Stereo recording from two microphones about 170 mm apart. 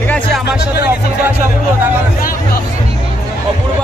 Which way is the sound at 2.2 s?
55° left (ahead or behind).